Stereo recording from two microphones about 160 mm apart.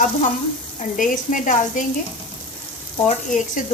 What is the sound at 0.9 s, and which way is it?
Speech, 55° left (ahead or behind).